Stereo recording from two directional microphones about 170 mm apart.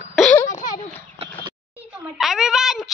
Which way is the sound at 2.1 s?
Centre (ahead or behind).